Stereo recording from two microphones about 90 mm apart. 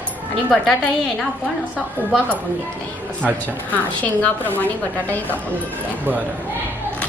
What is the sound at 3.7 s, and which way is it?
A woman's voice, 15° left (ahead or behind).